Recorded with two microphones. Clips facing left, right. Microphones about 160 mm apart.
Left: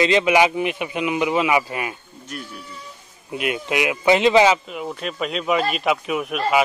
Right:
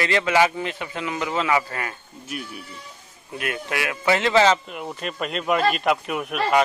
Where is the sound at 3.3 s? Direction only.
20° left (ahead or behind).